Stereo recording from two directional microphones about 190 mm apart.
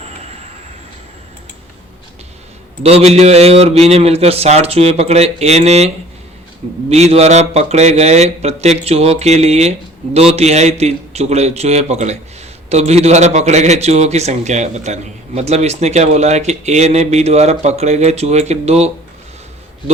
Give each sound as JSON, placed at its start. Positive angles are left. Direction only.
{"t": 2.8, "sound": "speech", "side_deg": -35}
{"t": 6.9, "sound": "speech", "side_deg": -35}